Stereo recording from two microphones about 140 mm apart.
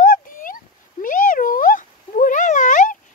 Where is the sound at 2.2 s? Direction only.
65° left (ahead or behind).